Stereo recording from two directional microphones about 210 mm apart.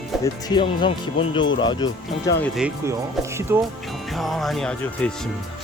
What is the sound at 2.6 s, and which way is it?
Speech, 5° right (ahead or behind).